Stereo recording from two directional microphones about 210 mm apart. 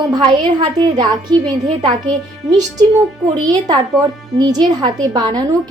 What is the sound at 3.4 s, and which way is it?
A woman's voice, 20° right (ahead or behind).